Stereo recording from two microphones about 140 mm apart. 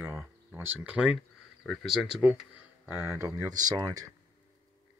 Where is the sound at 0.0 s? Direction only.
15° right (ahead or behind).